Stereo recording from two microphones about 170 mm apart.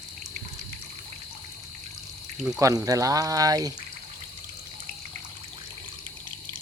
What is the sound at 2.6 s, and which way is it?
Speech, 20° right (ahead or behind).